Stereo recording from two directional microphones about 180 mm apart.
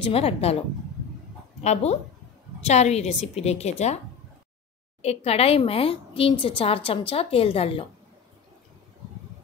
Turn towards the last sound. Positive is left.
turn(degrees=30)  # may be behind; listen again after turning